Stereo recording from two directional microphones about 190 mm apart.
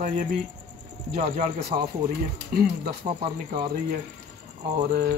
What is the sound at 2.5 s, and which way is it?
Speech, 50° right (ahead or behind).